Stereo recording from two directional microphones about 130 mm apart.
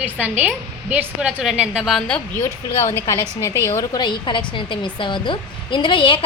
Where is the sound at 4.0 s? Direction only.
35° left (ahead or behind).